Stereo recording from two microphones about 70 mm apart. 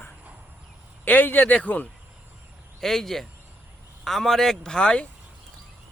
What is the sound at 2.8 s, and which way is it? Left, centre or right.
Speech, centre.